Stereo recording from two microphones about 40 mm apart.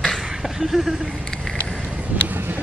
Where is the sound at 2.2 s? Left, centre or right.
Right.